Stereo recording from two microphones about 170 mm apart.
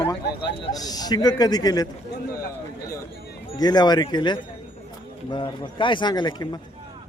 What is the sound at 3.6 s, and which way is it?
A man's voice, 25° left (ahead or behind).